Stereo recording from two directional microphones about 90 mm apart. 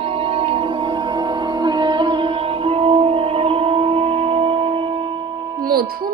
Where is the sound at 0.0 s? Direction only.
90° right; by 5.6 s 55° right (ahead or behind).